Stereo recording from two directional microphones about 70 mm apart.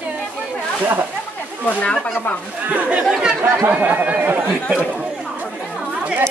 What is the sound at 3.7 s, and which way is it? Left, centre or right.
Speech, right.